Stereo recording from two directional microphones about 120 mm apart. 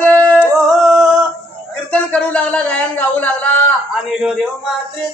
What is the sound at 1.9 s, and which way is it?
Speech, 10° left (ahead or behind).